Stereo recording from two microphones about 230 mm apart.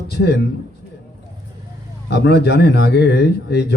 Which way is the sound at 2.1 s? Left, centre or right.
Left.